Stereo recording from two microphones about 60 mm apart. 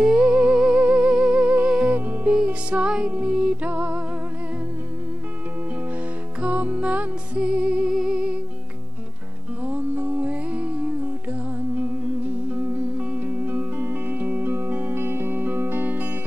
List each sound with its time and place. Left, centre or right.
0.0 s music: centre
6.4 s music: right
9.7 s music: right
12.4 s music: right